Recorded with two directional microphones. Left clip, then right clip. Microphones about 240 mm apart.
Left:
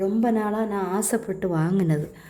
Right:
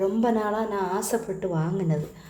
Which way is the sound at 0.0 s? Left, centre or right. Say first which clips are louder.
Even; centre.